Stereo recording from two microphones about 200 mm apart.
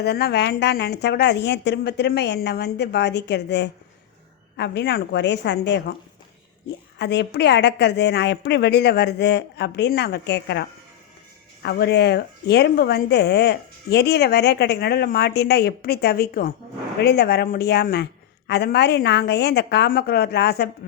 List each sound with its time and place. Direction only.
0.0 s speech: 55° left (ahead or behind)
7.0 s a woman's voice: 55° left (ahead or behind)